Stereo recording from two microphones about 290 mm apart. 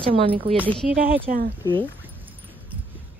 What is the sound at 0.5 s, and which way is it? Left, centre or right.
Speech, centre.